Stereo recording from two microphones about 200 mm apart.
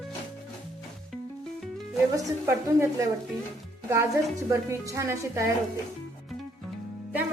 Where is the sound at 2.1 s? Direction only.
15° right (ahead or behind).